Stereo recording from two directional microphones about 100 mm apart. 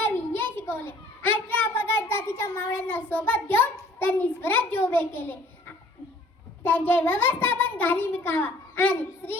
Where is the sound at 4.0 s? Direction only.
20° left (ahead or behind).